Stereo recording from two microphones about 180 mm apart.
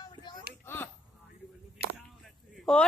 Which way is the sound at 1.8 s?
65° right (ahead or behind).